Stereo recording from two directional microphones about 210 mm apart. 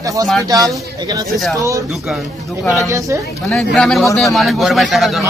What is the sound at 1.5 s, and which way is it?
Speech, 15° right (ahead or behind).